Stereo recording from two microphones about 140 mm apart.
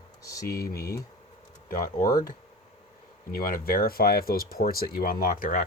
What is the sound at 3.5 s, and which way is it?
Speech, 90° left.